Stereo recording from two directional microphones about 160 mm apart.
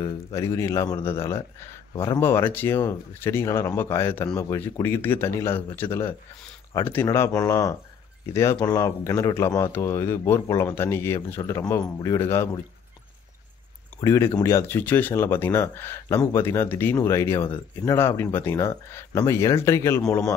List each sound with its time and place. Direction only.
0.0 s speech: 20° left (ahead or behind)
14.0 s speech: 15° left (ahead or behind)